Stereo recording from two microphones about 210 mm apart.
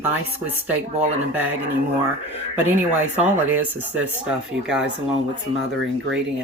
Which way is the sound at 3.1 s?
5° right (ahead or behind).